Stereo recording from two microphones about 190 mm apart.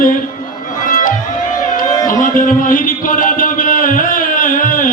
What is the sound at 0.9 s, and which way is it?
Music, 45° left (ahead or behind).